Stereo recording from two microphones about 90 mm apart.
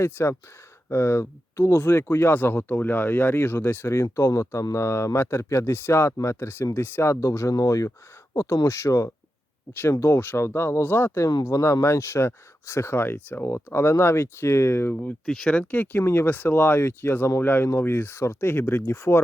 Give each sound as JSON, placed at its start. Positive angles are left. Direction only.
{"t": 0.0, "sound": "speech", "side_deg": 30}
{"t": 15.3, "sound": "speech", "side_deg": 10}